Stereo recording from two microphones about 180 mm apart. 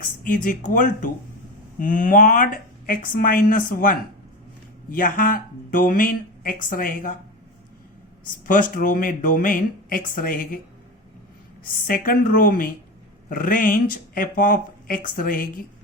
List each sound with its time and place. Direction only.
0.3 s speech: 50° left (ahead or behind)
8.4 s speech: 50° left (ahead or behind)
11.6 s speech: 50° left (ahead or behind)